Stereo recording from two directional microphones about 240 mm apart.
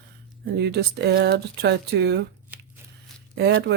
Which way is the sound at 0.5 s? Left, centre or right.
Right.